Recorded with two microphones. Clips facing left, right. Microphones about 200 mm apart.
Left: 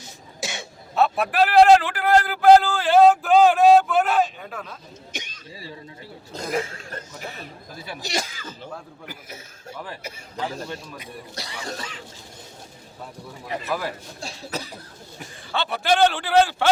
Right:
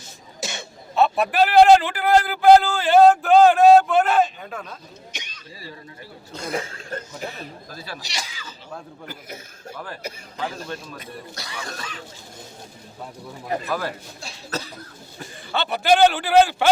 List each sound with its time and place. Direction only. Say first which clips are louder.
0.9 s a man's voice: right 1 dB; centre (ahead or behind)
5.1 s a man's voice: left 3 dB; 50° left (ahead or behind)
7.7 s speech: even; 20° left (ahead or behind)
8.0 s speech: left 6 dB; 50° left (ahead or behind)
9.7 s a man's voice: right 2 dB; 15° left (ahead or behind)
11.3 s speech: left 4 dB; 30° left (ahead or behind)
13.7 s a man's voice: left 2 dB; 5° left (ahead or behind)
15.5 s a man's voice: right 3 dB; centre (ahead or behind)